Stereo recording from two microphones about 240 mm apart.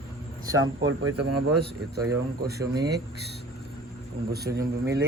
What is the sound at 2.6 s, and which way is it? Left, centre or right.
Speech, centre.